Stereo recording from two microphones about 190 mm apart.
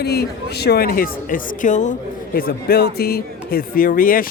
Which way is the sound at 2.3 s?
50° left (ahead or behind).